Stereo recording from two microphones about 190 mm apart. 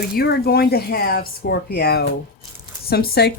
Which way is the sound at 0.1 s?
55° left (ahead or behind).